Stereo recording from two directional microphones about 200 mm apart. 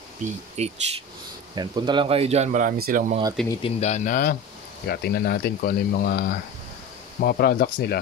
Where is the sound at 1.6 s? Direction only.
20° right (ahead or behind); by 3.1 s 45° right (ahead or behind).